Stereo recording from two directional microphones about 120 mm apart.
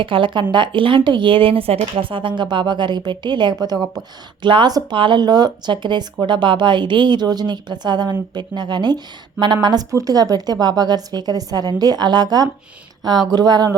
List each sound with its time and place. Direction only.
0.0 s speech: 45° right (ahead or behind)